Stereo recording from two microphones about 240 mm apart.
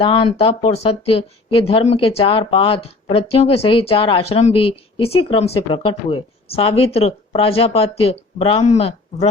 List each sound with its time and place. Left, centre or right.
0.0 s speech: left